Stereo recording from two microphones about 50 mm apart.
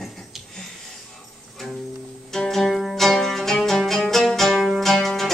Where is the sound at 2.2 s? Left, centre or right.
Centre.